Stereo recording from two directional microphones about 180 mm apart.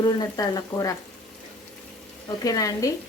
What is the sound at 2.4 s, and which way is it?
Speech, 20° left (ahead or behind).